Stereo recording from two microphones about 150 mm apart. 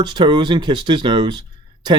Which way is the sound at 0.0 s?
30° right (ahead or behind).